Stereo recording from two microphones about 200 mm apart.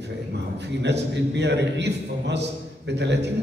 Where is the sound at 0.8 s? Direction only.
60° right (ahead or behind).